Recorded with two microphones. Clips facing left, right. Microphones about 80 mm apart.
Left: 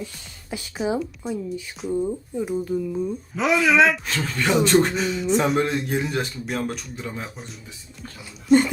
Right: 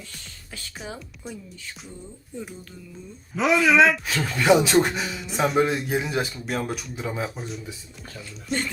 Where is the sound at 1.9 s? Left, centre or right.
Left.